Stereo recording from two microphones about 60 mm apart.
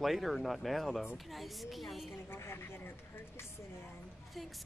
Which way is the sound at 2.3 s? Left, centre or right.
Left.